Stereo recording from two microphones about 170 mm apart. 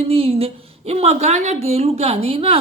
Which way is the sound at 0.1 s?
35° right (ahead or behind).